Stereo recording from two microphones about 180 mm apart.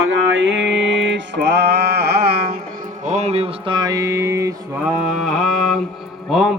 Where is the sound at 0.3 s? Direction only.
90° right; by 2.6 s 60° right (ahead or behind).